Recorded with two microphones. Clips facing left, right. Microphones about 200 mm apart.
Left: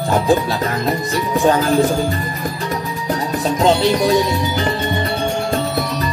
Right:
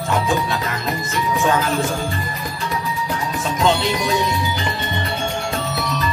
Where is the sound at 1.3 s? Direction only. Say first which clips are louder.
Left 4 dB; 35° left (ahead or behind).